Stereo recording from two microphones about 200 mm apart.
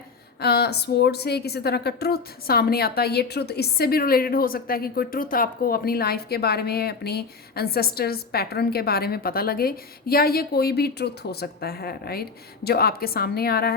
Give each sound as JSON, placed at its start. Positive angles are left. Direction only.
{"t": 0.4, "sound": "speech", "side_deg": 55}